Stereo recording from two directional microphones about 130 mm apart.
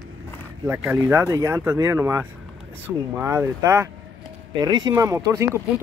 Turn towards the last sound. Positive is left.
turn(degrees=-25)  # may be behind; listen again after turning